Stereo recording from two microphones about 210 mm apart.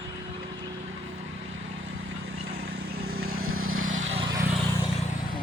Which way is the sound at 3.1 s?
90° right.